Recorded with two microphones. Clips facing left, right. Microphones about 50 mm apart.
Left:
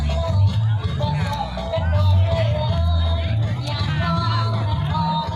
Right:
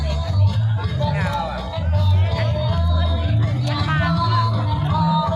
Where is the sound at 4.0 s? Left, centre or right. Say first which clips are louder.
Right 2 dB; centre.